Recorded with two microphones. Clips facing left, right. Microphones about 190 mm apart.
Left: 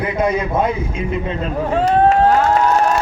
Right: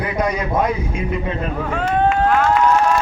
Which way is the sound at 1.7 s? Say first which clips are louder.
Left 5 dB; 35° left (ahead or behind).